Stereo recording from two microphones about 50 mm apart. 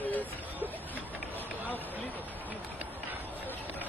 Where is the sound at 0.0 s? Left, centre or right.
Left.